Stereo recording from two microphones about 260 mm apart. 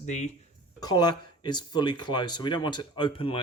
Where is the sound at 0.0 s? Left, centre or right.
Left.